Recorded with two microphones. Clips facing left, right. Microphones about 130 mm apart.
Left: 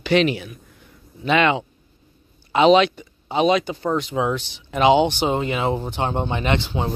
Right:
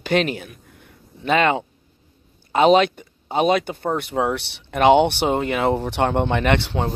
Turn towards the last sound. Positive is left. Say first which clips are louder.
# right 2 dB
turn(degrees=-65)  # may be behind; listen again after turning